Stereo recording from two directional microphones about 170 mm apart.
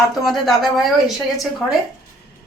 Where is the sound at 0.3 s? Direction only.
Centre (ahead or behind).